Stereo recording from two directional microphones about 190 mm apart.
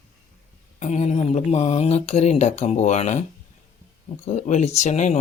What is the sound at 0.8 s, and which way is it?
Speech, 35° left (ahead or behind).